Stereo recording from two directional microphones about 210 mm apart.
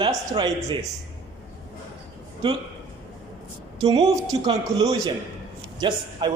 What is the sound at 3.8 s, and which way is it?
A man's voice, 20° right (ahead or behind).